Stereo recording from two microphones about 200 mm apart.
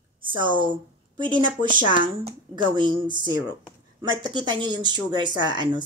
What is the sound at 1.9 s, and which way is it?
Speech, 25° right (ahead or behind).